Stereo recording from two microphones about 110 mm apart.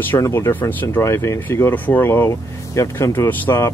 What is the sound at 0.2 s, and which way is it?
Speech, 25° left (ahead or behind).